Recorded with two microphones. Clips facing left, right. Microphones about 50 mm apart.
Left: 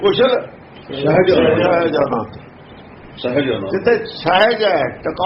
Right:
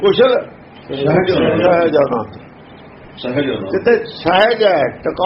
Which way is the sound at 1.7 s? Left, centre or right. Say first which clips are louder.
Right 3 dB; right.